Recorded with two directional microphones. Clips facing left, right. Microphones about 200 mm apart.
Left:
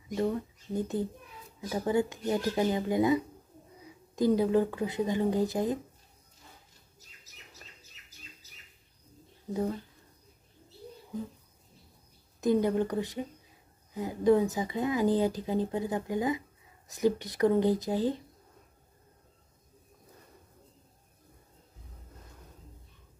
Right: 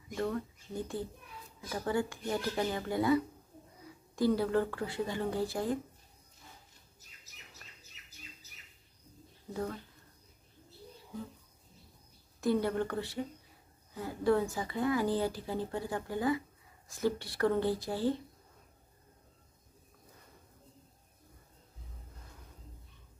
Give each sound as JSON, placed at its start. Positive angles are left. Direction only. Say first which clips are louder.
{"t": 0.1, "sound": "speech", "louder": "left 4 dB", "side_deg": 20}
{"t": 9.5, "sound": "speech", "louder": "left 6 dB", "side_deg": 20}
{"t": 12.4, "sound": "speech", "louder": "left 4 dB", "side_deg": 20}